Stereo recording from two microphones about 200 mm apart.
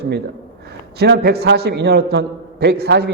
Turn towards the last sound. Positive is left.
turn(degrees=-55)  # may be behind; listen again after turning